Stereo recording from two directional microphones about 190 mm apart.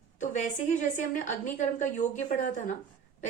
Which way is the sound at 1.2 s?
40° left (ahead or behind).